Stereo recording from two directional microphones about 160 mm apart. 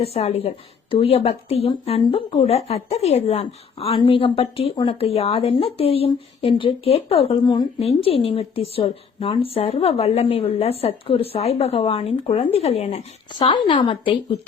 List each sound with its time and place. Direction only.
0.0 s a woman's voice: 40° left (ahead or behind)